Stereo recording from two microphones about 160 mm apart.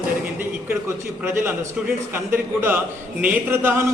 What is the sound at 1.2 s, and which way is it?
A man's voice, 15° right (ahead or behind).